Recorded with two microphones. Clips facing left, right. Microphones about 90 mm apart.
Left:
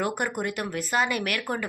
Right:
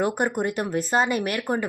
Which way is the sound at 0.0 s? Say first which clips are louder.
Right 4 dB; 25° right (ahead or behind).